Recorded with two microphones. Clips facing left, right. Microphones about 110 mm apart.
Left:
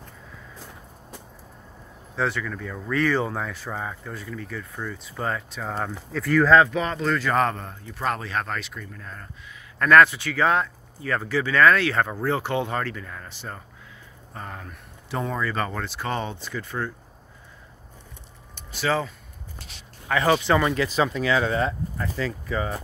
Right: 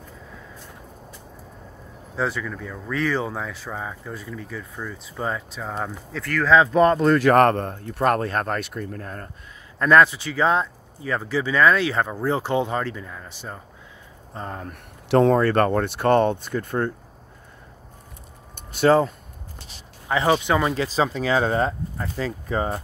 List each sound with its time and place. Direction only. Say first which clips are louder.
2.1 s speech: right 1 dB; 10° right (ahead or behind)
4.1 s speech: right 1 dB; 15° right (ahead or behind)
6.2 s speech: left 5 dB; 10° left (ahead or behind)
6.7 s speech: right 8 dB; 50° right (ahead or behind)
9.8 s speech: even; 20° right (ahead or behind)
14.3 s speech: right 4 dB; 30° right (ahead or behind)
14.7 s speech: right 12 dB; 70° right (ahead or behind); by 16.9 s 50° right (ahead or behind)
18.5 s a sound: right 8 dB; 50° right (ahead or behind)
20.1 s speech: even; 20° right (ahead or behind)
20.7 s speech: right 1 dB; 30° right (ahead or behind)
21.9 s speech: even; 25° right (ahead or behind)
22.5 s speech: right 5 dB; 40° right (ahead or behind)